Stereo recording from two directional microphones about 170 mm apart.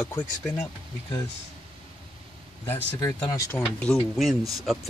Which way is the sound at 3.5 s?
5° left (ahead or behind).